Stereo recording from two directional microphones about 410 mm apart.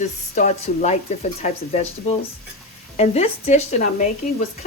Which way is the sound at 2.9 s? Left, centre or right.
Centre.